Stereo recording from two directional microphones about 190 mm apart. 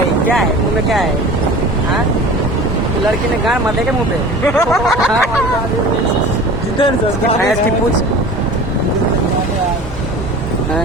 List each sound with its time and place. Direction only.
4.4 s speech: centre (ahead or behind)
6.7 s speech: 25° left (ahead or behind)